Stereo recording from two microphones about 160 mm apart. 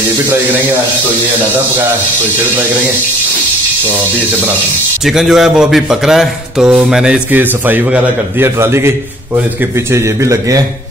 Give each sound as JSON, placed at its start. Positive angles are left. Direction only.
{"t": 5.0, "sound": "speech", "side_deg": 0}
{"t": 10.2, "sound": "a man's voice", "side_deg": -20}